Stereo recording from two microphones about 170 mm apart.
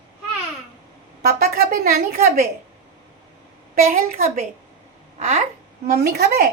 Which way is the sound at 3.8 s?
55° right (ahead or behind).